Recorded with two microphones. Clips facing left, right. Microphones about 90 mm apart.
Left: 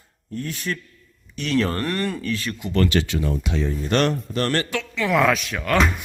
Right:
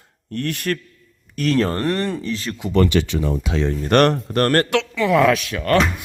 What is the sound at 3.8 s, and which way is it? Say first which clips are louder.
Speech: right 6 dB; 60° right (ahead or behind).